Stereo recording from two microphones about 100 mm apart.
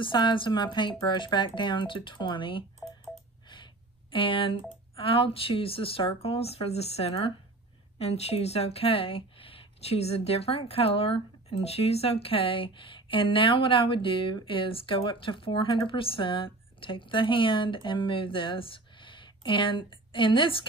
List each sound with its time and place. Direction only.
0.0 s speech: 55° left (ahead or behind)